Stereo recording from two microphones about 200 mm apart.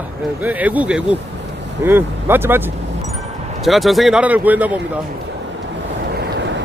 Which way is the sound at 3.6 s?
Centre (ahead or behind).